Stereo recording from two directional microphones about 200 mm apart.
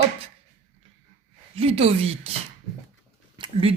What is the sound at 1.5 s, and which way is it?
Speech, 30° right (ahead or behind).